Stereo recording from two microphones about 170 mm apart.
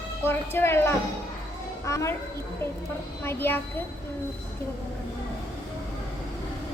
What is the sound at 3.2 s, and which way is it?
Speech, 15° left (ahead or behind).